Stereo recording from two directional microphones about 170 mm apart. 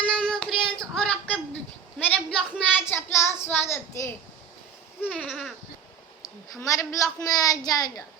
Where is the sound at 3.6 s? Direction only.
15° left (ahead or behind).